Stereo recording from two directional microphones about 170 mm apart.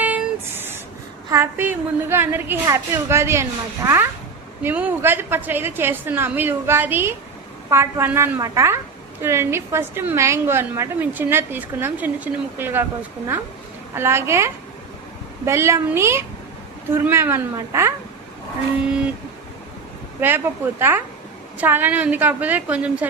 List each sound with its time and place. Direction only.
0.0 s a sound: 10° right (ahead or behind)
1.3 s a woman's voice: 15° right (ahead or behind)
4.6 s a woman's voice: 10° right (ahead or behind)
20.2 s a woman's voice: 10° right (ahead or behind)